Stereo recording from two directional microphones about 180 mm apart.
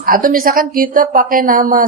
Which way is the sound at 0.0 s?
50° right (ahead or behind).